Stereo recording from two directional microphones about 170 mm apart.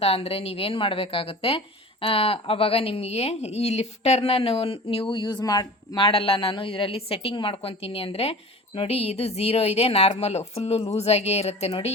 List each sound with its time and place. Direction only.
0.0 s a woman's voice: 35° left (ahead or behind)